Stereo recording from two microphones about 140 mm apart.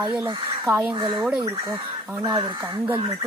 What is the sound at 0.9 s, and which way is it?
Speech, 35° right (ahead or behind).